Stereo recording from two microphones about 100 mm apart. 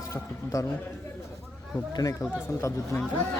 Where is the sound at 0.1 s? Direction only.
35° left (ahead or behind).